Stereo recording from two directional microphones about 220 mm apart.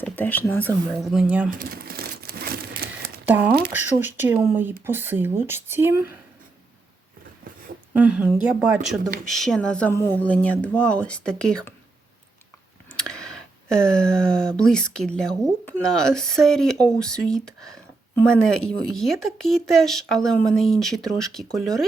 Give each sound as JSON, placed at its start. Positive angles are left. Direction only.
{"t": 0.0, "sound": "speech", "side_deg": 10}
{"t": 1.5, "sound": "crumpling", "side_deg": -40}
{"t": 3.2, "sound": "speech", "side_deg": -5}
{"t": 7.9, "sound": "speech", "side_deg": -5}
{"t": 12.9, "sound": "speech", "side_deg": 5}